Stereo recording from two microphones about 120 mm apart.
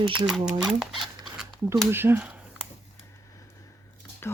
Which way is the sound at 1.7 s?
20° right (ahead or behind).